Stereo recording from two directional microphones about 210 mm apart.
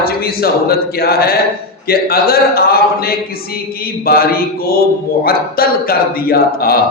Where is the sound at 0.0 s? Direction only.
45° left (ahead or behind).